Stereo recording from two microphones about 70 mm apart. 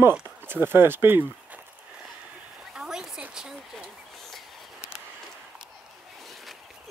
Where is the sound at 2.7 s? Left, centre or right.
Centre.